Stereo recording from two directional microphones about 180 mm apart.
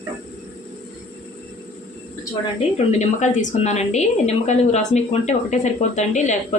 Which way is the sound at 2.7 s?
40° left (ahead or behind).